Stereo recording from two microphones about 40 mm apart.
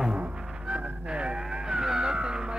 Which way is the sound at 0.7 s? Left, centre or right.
Right.